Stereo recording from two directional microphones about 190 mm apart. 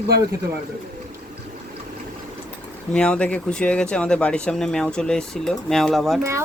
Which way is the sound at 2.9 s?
5° left (ahead or behind).